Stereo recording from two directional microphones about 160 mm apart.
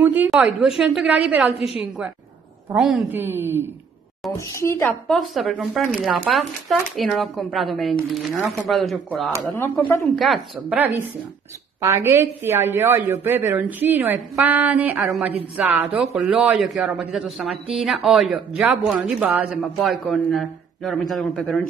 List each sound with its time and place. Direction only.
0.0 s a woman's voice: 10° right (ahead or behind)
2.7 s speech: centre (ahead or behind)
3.1 s a woman's voice: 15° right (ahead or behind)
4.4 s speech: 20° left (ahead or behind)
5.0 s speech: centre (ahead or behind)
9.5 s speech: 15° left (ahead or behind)
10.1 s speech: centre (ahead or behind)
11.8 s a woman's voice: 15° right (ahead or behind); by 21.6 s 5° left (ahead or behind)